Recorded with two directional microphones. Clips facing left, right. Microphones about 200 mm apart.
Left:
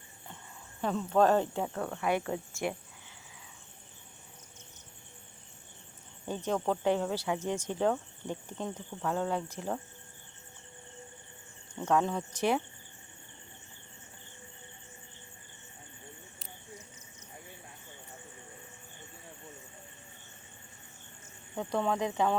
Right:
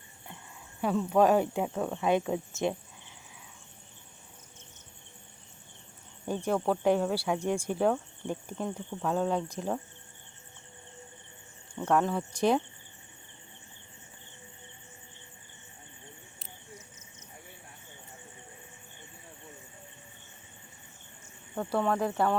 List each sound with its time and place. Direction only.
0.8 s speech: 10° right (ahead or behind)
6.2 s speech: 10° right (ahead or behind)
11.9 s speech: 5° right (ahead or behind)
21.5 s speech: centre (ahead or behind)